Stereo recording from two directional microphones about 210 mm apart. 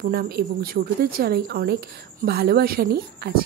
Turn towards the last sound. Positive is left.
turn(degrees=-45)  # may be behind; listen again after turning